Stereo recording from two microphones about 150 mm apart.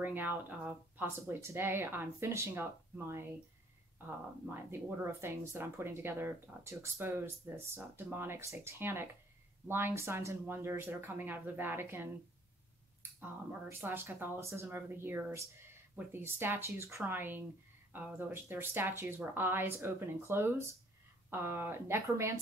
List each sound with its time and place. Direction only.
0.0 s speech: 15° right (ahead or behind)
4.5 s speech: 15° right (ahead or behind)
13.2 s speech: 15° right (ahead or behind)